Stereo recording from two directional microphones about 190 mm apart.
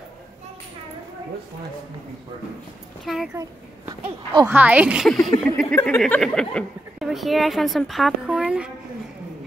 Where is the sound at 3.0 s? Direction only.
Centre (ahead or behind).